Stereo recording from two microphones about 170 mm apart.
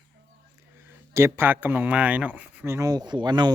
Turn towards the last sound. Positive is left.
turn(degrees=-25)  # may be behind; listen again after turning